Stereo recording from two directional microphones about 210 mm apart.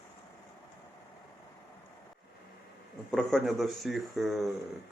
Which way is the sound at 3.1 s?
Centre (ahead or behind).